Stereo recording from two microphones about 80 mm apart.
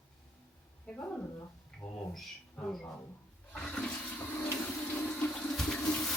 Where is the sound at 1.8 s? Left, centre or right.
Centre.